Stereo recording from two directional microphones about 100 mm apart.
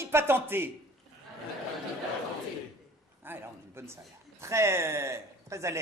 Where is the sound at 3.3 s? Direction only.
25° right (ahead or behind).